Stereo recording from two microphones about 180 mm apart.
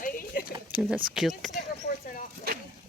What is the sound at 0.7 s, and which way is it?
Speech, 5° right (ahead or behind).